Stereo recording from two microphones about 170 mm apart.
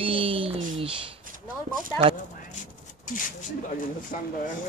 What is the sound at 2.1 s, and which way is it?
Speech, 55° left (ahead or behind).